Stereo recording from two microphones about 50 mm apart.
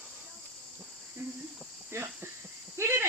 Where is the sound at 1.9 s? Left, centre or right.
Right.